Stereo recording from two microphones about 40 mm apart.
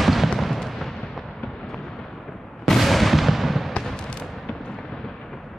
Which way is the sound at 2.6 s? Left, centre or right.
Centre.